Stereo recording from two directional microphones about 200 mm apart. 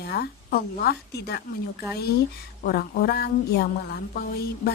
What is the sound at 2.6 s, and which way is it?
A woman's voice, 50° left (ahead or behind).